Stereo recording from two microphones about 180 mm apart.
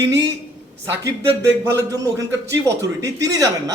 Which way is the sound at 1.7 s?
20° right (ahead or behind).